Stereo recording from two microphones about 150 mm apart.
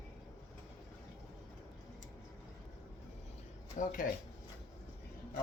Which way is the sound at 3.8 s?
60° left (ahead or behind).